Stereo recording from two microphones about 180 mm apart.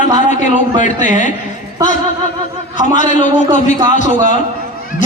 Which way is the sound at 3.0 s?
45° left (ahead or behind).